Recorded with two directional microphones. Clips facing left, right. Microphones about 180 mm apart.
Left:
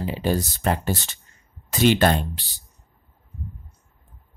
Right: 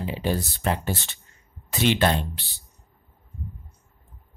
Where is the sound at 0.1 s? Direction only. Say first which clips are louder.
Left 3 dB; 45° left (ahead or behind).